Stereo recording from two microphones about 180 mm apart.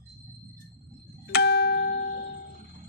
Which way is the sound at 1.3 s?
65° left (ahead or behind).